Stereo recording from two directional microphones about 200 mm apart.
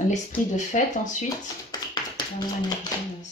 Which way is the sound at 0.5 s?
40° left (ahead or behind).